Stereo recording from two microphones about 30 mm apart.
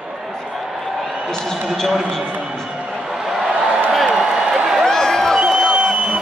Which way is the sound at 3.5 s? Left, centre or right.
Right.